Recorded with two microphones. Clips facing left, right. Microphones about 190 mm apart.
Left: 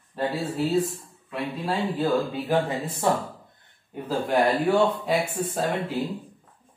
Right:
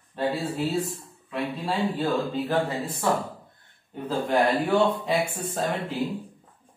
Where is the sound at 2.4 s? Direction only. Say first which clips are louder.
Left 1 dB; 20° left (ahead or behind).